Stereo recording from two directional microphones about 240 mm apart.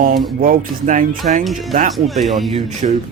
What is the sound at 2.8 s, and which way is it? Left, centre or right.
Speech, right.